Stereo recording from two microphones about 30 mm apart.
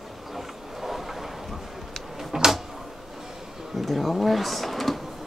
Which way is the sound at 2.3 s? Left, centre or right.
Centre.